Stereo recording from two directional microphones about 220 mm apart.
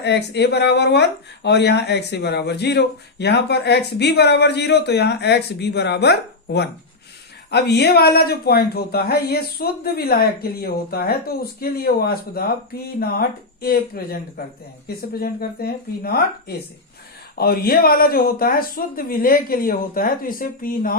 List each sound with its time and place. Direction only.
0.0 s speech: 50° left (ahead or behind)